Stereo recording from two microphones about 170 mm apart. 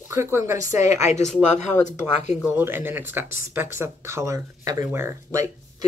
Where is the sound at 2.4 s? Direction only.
10° right (ahead or behind).